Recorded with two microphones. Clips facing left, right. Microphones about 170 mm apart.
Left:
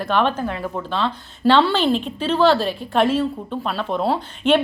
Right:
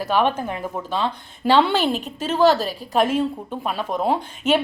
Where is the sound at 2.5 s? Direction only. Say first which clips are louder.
Left 2 dB; 40° right (ahead or behind).